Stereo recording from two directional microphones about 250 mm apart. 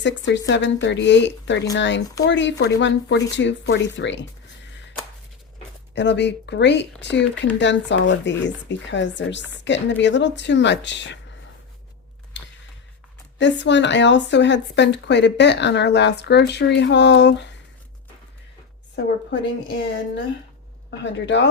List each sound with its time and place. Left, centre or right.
0.0 s speech: left
5.9 s speech: left
12.4 s a sound: left
13.4 s speech: left
19.0 s speech: left
21.0 s speech: left